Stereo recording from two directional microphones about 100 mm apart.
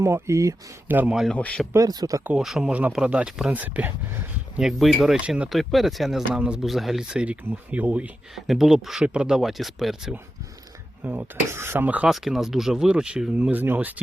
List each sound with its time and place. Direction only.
0.0 s speech: 30° right (ahead or behind)
0.9 s speech: 20° right (ahead or behind)
1.1 s speech: 5° right (ahead or behind)
1.4 s speech: 15° left (ahead or behind)
1.7 s speech: 40° right (ahead or behind)
2.4 s speech: 5° right (ahead or behind); by 4.6 s 20° right (ahead or behind)
4.6 s speech: centre (ahead or behind)
5.1 s speech: 10° right (ahead or behind)
5.5 s speech: centre (ahead or behind)
8.4 s speech: centre (ahead or behind)
11.0 s speech: 20° right (ahead or behind)
12.0 s speech: 5° right (ahead or behind)